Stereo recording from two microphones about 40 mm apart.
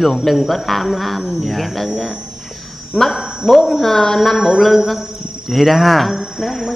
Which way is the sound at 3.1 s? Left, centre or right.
Right.